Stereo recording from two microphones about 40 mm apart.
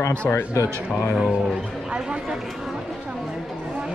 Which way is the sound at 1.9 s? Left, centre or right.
Centre.